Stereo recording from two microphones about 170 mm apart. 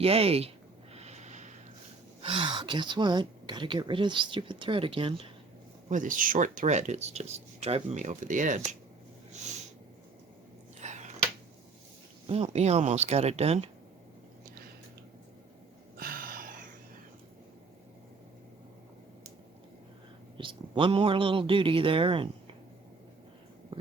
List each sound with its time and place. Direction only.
0.0 s speech: 35° right (ahead or behind)
0.9 s snort: 40° right (ahead or behind)
2.2 s a woman's voice: 30° right (ahead or behind)
5.9 s speech: 50° right (ahead or behind)
10.8 s a sound: 45° right (ahead or behind)
12.3 s speech: 40° right (ahead or behind)
16.0 s a sound: 55° right (ahead or behind)
20.4 s speech: 30° right (ahead or behind)